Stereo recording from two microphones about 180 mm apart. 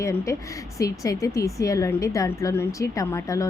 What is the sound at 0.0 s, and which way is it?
A woman's voice, 15° left (ahead or behind).